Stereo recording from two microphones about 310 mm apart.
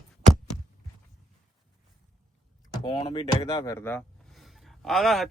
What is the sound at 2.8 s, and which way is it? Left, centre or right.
Speech, centre.